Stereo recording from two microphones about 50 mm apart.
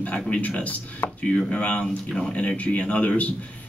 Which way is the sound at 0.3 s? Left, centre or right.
Left.